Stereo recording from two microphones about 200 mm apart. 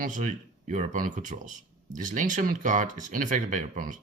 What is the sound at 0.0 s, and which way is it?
Speech, 40° right (ahead or behind).